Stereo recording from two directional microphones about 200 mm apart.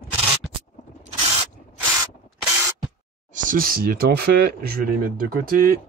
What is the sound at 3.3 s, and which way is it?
Speech, 45° right (ahead or behind).